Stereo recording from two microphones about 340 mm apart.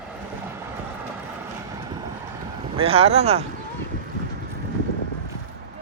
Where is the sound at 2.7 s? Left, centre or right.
Centre.